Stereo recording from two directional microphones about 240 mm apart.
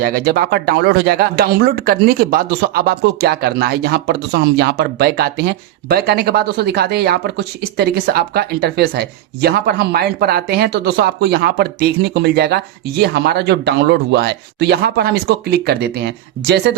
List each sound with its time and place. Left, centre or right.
0.0 s a woman's voice: right